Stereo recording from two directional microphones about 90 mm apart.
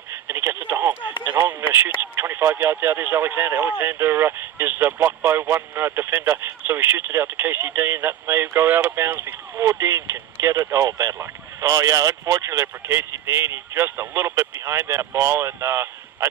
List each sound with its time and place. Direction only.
0.1 s telephone: 30° right (ahead or behind)
1.2 s speech: 20° right (ahead or behind)